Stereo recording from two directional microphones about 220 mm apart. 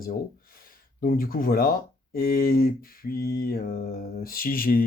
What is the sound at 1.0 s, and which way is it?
Speech, 40° left (ahead or behind).